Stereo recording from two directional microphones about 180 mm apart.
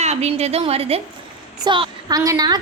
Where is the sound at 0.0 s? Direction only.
35° right (ahead or behind).